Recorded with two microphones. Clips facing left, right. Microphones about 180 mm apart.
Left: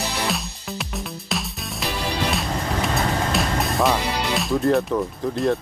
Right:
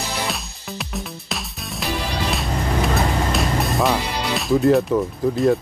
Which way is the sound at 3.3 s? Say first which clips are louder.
Right 1 dB; centre (ahead or behind).